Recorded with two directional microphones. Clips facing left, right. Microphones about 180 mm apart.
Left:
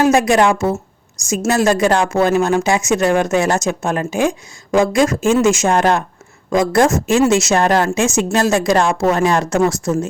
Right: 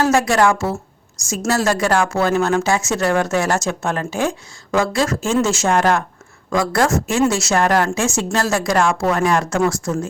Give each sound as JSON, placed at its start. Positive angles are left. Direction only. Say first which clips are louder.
{"t": 0.0, "sound": "a woman's voice", "louder": "left 3 dB", "side_deg": 15}